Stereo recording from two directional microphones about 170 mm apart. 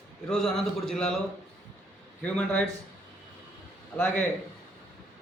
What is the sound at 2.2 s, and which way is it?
Speech, 5° left (ahead or behind).